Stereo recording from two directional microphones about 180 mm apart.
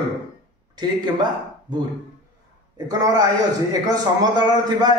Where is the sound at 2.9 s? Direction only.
20° right (ahead or behind).